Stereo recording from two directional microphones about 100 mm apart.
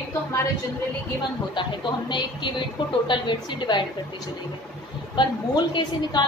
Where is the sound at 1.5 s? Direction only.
50° left (ahead or behind).